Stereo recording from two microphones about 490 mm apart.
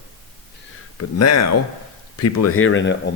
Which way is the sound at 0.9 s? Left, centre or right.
Left.